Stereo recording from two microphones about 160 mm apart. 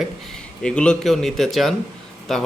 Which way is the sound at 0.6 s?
5° left (ahead or behind).